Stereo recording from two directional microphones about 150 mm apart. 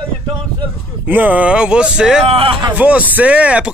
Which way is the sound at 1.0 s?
10° right (ahead or behind).